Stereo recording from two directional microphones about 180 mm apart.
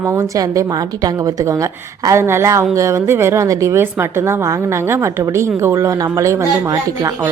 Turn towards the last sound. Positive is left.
turn(degrees=-15)  # may be behind; listen again after turning